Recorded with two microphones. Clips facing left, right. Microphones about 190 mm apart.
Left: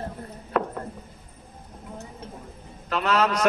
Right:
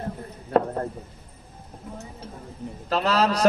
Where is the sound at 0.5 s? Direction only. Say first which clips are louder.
Right 5 dB; 35° right (ahead or behind).